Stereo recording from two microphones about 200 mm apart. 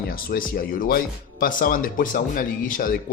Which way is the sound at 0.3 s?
45° left (ahead or behind).